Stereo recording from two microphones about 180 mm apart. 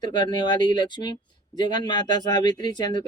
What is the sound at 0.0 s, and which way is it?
Speech, 25° left (ahead or behind).